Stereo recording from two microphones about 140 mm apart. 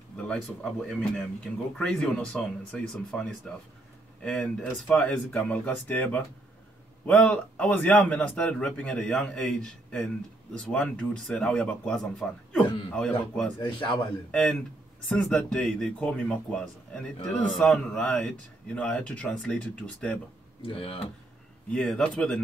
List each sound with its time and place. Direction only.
0.3 s a man's voice: 5° left (ahead or behind)
13.6 s a man's voice: 35° left (ahead or behind)
14.3 s a man's voice: 5° left (ahead or behind)
20.6 s speech: 45° left (ahead or behind)
21.6 s speech: 5° left (ahead or behind)